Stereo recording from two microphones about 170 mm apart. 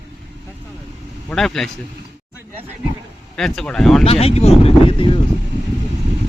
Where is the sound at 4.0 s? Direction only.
35° left (ahead or behind).